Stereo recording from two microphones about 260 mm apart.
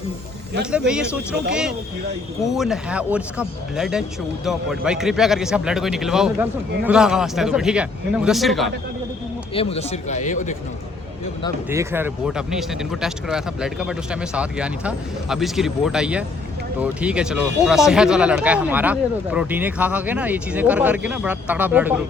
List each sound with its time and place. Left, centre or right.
0.7 s speech: centre
9.6 s a man's voice: left
11.7 s speech: centre